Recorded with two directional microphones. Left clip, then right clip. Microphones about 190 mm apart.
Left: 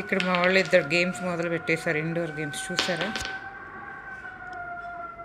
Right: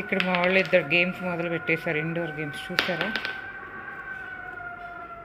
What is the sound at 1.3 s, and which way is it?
Speech, 55° left (ahead or behind).